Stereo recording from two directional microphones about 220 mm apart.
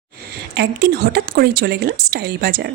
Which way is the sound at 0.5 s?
45° right (ahead or behind).